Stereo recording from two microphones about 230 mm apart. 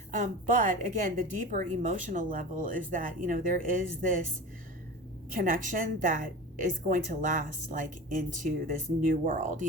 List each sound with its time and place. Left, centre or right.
0.1 s a woman's voice: right
5.3 s a woman's voice: right